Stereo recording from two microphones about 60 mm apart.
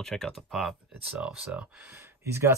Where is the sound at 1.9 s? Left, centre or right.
Right.